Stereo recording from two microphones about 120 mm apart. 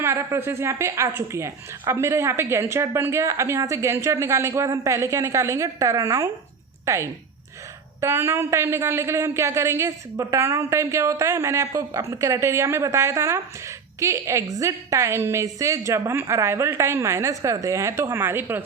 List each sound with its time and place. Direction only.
0.0 s a woman's voice: 20° right (ahead or behind)